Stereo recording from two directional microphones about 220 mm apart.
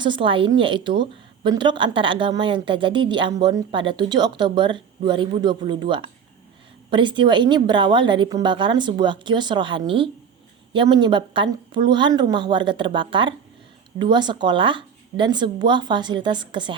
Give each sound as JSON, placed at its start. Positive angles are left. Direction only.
{"t": 0.0, "sound": "a woman's voice", "side_deg": -20}